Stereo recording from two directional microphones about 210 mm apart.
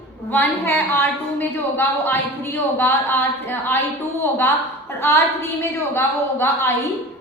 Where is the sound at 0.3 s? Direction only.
10° left (ahead or behind).